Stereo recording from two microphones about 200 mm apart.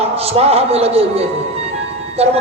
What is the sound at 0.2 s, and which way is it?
Speech, 30° right (ahead or behind).